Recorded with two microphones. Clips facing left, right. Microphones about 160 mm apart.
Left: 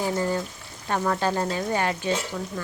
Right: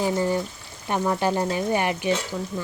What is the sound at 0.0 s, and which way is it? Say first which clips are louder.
Speech: right 2 dB; 15° right (ahead or behind).